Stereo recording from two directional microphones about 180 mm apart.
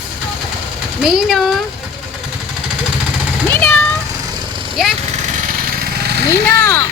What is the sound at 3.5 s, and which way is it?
Cat, 10° left (ahead or behind).